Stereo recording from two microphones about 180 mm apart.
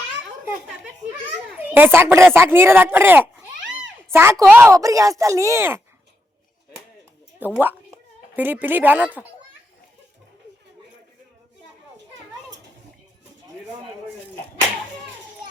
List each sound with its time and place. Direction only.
1.5 s speech: 10° right (ahead or behind)
7.3 s a sound: 10° right (ahead or behind)
8.4 s speech: 10° right (ahead or behind)